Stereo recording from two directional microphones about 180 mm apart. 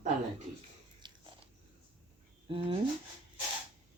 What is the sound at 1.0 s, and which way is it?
Biting, 25° right (ahead or behind).